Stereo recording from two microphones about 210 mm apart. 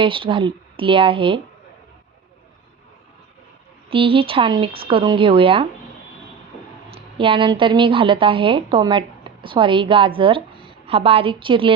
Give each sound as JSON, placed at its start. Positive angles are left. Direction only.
{"t": 0.0, "sound": "speech", "side_deg": -25}
{"t": 3.8, "sound": "speech", "side_deg": -25}
{"t": 6.9, "sound": "a woman's voice", "side_deg": -25}